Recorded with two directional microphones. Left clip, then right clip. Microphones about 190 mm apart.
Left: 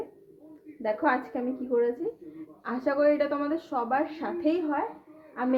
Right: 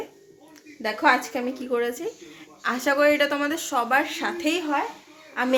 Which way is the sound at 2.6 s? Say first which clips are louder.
Right 5 dB; 20° right (ahead or behind).